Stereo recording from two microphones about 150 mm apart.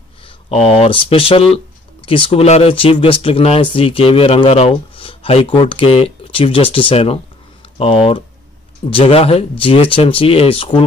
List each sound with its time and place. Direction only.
0.5 s speech: 40° left (ahead or behind)